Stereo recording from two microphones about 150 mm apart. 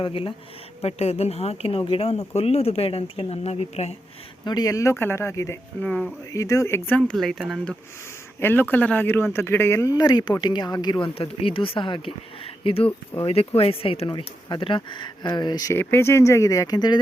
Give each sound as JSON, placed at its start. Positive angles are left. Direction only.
{"t": 0.0, "sound": "speech", "side_deg": 35}
{"t": 4.4, "sound": "speech", "side_deg": 25}
{"t": 5.8, "sound": "speech", "side_deg": 10}
{"t": 6.3, "sound": "speech", "side_deg": 20}
{"t": 8.4, "sound": "speech", "side_deg": 15}
{"t": 15.8, "sound": "speech", "side_deg": 15}